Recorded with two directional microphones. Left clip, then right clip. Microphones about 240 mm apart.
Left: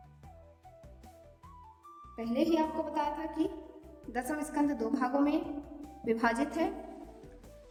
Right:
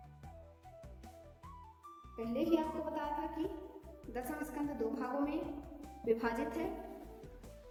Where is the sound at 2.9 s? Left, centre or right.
Left.